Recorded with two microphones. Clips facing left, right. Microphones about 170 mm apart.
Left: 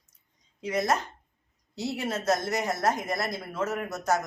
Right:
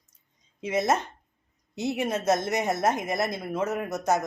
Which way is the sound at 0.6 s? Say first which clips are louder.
Right 2 dB; 20° right (ahead or behind).